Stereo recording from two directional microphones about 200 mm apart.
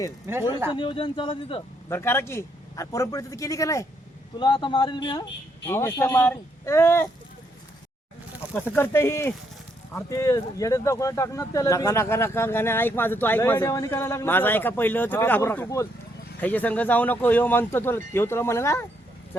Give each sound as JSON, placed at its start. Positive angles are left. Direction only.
{"t": 0.3, "sound": "speech", "side_deg": -10}
{"t": 0.7, "sound": "speech", "side_deg": 25}
{"t": 1.9, "sound": "speech", "side_deg": 10}
{"t": 8.7, "sound": "speech", "side_deg": 10}